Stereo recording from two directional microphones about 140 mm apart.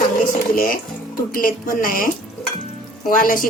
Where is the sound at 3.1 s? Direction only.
85° left.